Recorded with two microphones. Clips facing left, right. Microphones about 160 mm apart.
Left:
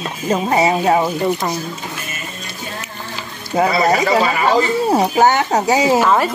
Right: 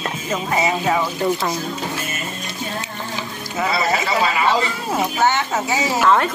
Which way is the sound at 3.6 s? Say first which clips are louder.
Left 6 dB; 40° left (ahead or behind).